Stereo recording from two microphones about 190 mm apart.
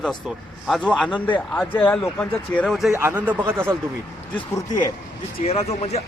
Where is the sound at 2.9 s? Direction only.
10° right (ahead or behind).